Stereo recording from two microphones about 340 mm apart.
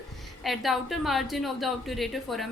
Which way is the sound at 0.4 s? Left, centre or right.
Centre.